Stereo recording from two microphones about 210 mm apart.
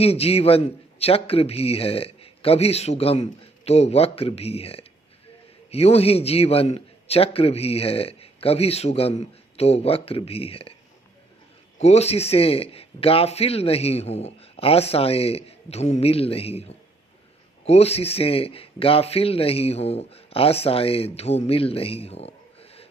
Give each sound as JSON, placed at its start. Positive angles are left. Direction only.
{"t": 0.0, "sound": "a man's voice", "side_deg": 30}
{"t": 11.8, "sound": "a man's voice", "side_deg": 30}